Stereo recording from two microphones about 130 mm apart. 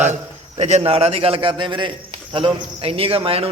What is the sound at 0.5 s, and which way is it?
A man's voice, 55° right (ahead or behind).